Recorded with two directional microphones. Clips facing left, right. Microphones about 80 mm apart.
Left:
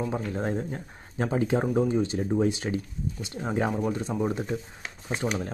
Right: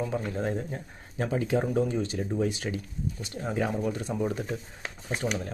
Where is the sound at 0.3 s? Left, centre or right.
Left.